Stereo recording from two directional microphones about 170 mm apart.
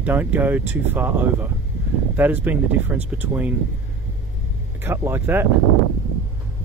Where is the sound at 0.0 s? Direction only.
10° right (ahead or behind).